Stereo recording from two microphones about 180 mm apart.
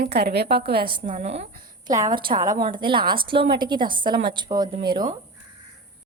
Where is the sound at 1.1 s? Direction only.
40° right (ahead or behind).